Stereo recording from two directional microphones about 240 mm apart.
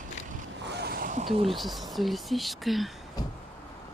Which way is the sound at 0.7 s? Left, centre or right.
Right.